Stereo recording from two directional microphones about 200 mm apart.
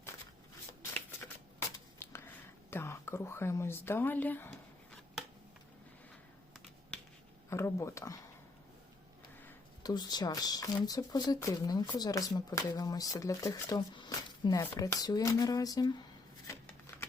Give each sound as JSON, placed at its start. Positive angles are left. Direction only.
{"t": 1.5, "sound": "a sound", "side_deg": 10}
{"t": 2.6, "sound": "speech", "side_deg": 10}
{"t": 6.9, "sound": "finger snapping", "side_deg": 5}
{"t": 7.5, "sound": "speech", "side_deg": 15}
{"t": 9.8, "sound": "speech", "side_deg": 20}
{"t": 16.5, "sound": "shuffling cards", "side_deg": 10}